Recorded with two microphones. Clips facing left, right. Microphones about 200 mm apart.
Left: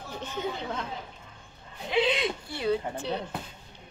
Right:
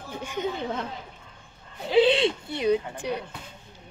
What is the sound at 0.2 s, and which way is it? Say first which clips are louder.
Chatter: right 4 dB; 15° right (ahead or behind).